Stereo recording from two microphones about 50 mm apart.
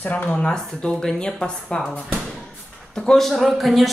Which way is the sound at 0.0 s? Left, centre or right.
Left.